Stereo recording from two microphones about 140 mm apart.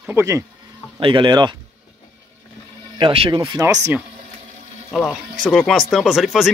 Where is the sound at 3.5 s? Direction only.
20° right (ahead or behind).